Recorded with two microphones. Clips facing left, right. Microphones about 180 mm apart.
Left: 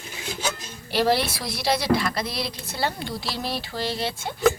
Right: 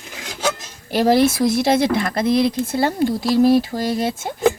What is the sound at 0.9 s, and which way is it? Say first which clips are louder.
Speech: right 7 dB; 45° right (ahead or behind).